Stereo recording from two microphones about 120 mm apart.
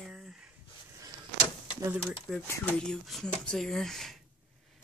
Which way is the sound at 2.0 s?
5° left (ahead or behind).